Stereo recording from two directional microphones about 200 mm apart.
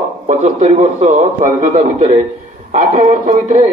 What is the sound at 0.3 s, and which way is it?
A man's voice, 35° right (ahead or behind).